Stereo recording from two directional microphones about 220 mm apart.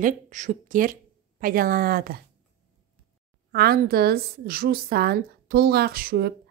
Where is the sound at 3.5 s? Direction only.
45° right (ahead or behind).